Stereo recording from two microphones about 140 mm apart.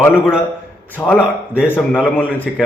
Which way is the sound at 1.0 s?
10° left (ahead or behind).